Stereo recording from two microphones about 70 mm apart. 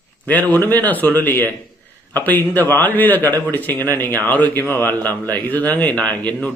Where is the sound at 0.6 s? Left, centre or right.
Left.